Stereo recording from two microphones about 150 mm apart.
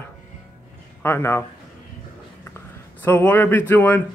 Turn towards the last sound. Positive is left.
turn(degrees=15)  # may be behind; listen again after turning